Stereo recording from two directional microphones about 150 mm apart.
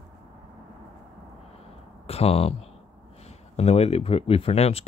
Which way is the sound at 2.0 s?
40° left (ahead or behind).